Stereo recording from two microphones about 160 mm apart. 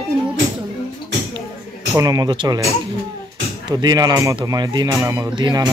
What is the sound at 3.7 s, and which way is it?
Speech, 25° right (ahead or behind).